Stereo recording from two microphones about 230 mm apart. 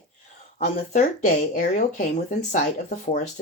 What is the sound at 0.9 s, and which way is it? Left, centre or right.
Speech, left.